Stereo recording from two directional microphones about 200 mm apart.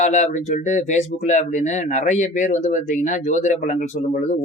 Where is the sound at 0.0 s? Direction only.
35° left (ahead or behind).